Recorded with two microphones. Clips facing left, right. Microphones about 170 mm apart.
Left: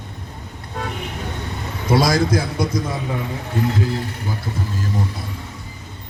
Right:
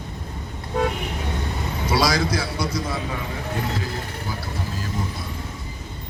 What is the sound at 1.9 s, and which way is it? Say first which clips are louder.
Speech: left 5 dB; 50° left (ahead or behind).